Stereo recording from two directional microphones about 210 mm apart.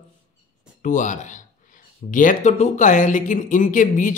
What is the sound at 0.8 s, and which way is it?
Speech, 35° left (ahead or behind).